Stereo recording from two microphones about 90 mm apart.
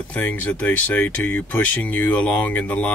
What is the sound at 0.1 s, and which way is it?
Speech, 20° left (ahead or behind).